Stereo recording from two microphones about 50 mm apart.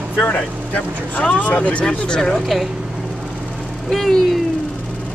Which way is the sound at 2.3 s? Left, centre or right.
Centre.